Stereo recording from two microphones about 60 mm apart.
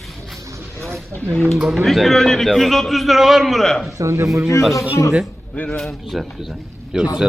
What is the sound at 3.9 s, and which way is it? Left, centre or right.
Speech, right.